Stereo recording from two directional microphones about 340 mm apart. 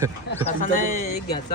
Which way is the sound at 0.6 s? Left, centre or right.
Left.